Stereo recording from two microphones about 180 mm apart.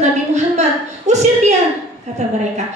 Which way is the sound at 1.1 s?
40° right (ahead or behind).